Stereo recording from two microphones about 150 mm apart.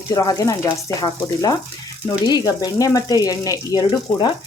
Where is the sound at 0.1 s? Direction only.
25° left (ahead or behind).